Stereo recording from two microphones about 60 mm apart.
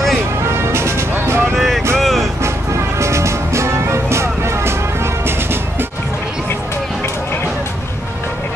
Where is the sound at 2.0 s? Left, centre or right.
Centre.